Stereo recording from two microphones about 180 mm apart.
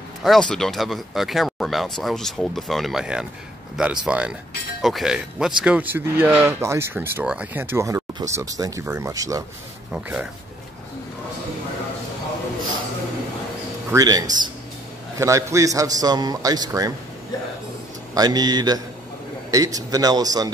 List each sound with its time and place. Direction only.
0.2 s a man's voice: 5° left (ahead or behind); by 9.4 s 20° right (ahead or behind)
9.9 s speech: 5° right (ahead or behind)
13.9 s a man's voice: 20° right (ahead or behind)
18.1 s a man's voice: 20° right (ahead or behind)